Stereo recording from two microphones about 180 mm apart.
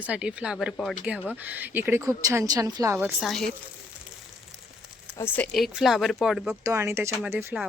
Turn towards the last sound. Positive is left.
turn(degrees=-15)  # may be behind; listen again after turning